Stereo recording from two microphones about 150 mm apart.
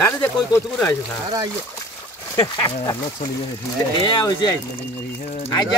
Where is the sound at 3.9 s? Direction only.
30° left (ahead or behind).